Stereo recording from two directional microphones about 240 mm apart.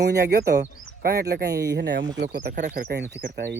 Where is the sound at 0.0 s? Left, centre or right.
Right.